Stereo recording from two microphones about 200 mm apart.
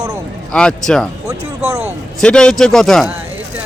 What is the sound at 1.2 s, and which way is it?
Speech, 15° right (ahead or behind).